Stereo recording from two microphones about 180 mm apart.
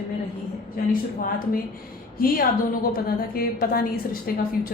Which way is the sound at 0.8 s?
55° left (ahead or behind).